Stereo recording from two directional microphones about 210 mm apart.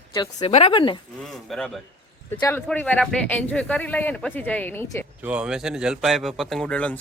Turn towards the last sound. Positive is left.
turn(degrees=5)  # may be behind; listen again after turning